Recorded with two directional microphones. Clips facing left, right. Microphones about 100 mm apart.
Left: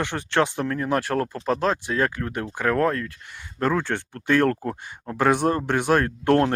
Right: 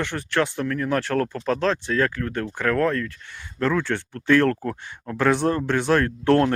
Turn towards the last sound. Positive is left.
turn(degrees=25)  # may be behind; listen again after turning